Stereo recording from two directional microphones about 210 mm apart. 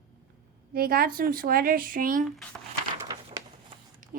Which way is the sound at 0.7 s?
45° right (ahead or behind).